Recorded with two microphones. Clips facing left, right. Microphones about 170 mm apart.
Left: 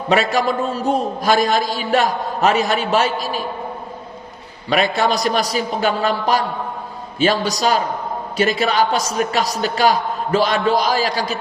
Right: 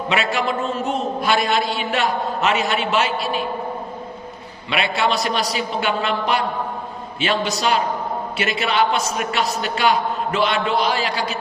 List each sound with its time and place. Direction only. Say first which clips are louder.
0.1 s a man's voice: left 5 dB; 40° left (ahead or behind)
4.7 s a man's voice: left 3 dB; 40° left (ahead or behind)